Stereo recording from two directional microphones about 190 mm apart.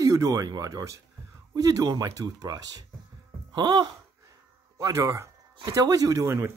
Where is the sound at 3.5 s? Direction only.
25° right (ahead or behind).